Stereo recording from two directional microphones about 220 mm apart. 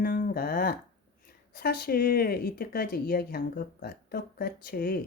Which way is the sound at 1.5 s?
45° left (ahead or behind).